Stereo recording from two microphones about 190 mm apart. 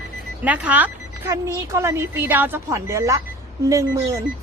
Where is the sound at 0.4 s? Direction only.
5° right (ahead or behind).